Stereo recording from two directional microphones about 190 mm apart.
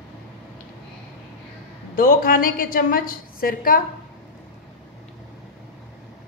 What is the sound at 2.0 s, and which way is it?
A woman's voice, 50° left (ahead or behind).